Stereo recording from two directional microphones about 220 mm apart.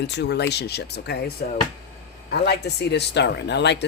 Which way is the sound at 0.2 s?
50° left (ahead or behind).